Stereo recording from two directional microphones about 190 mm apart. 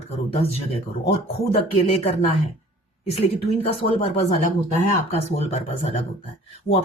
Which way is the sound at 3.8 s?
45° left (ahead or behind).